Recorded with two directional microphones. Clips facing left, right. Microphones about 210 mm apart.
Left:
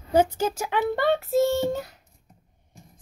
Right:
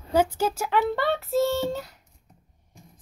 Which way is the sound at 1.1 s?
15° left (ahead or behind).